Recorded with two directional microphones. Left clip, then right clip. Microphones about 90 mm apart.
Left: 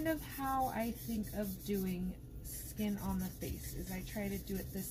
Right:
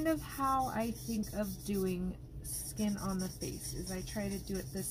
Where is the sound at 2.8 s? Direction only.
40° right (ahead or behind).